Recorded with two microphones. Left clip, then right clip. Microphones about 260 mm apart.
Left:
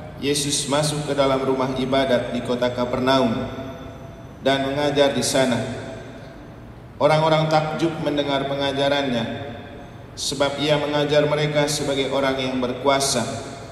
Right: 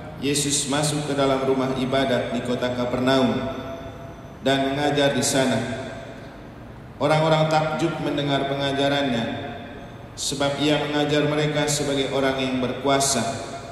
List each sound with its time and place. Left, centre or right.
0.2 s a man's voice: left
4.4 s a man's voice: left
7.0 s a man's voice: left
10.2 s a man's voice: left